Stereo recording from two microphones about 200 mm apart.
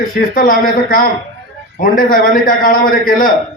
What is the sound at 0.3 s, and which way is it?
A man's voice, 45° left (ahead or behind).